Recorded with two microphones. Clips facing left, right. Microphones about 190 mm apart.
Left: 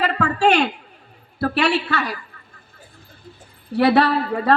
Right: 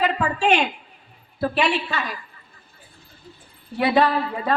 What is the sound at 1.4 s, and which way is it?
Speech, 70° left (ahead or behind).